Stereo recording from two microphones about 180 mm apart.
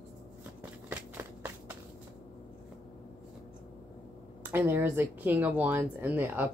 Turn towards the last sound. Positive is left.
turn(degrees=-10)  # may be behind; listen again after turning